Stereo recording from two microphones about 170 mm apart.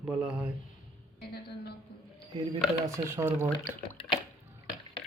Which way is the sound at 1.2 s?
70° left (ahead or behind).